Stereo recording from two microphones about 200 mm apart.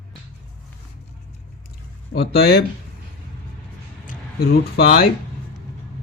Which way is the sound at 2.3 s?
50° left (ahead or behind).